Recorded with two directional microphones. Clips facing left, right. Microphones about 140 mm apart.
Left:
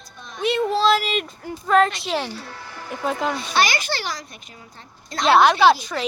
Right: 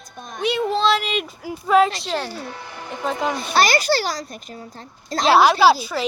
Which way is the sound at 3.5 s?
40° right (ahead or behind).